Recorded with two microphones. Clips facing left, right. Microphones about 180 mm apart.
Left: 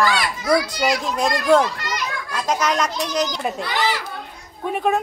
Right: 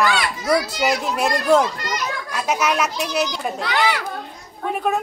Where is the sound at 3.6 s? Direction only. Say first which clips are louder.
Right 4 dB; 65° right (ahead or behind).